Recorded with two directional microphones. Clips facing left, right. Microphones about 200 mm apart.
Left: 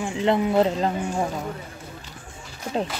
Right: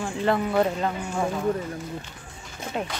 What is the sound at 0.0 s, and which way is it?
Speech, 20° left (ahead or behind).